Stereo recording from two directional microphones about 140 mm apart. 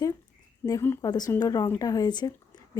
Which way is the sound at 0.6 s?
25° left (ahead or behind).